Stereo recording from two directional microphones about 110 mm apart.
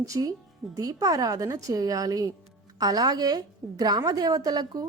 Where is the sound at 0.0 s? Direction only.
30° right (ahead or behind).